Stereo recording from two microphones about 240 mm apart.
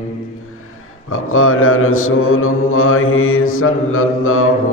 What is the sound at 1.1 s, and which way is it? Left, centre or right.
Mantra, left.